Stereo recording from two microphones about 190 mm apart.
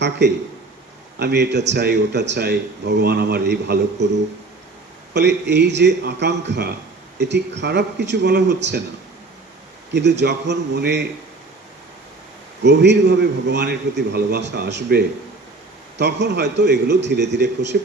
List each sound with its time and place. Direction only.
0.0 s a man's voice: 65° right (ahead or behind)
5.1 s a man's voice: 65° right (ahead or behind)
9.9 s a man's voice: 65° right (ahead or behind)
12.6 s a man's voice: 65° right (ahead or behind)